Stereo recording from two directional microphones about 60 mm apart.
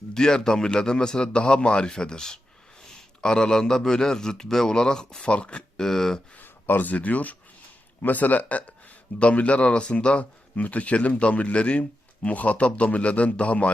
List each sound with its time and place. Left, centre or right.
0.1 s a man's voice: centre
6.4 s a man's voice: left